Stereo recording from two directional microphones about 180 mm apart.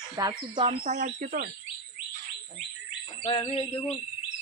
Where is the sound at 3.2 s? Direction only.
30° left (ahead or behind).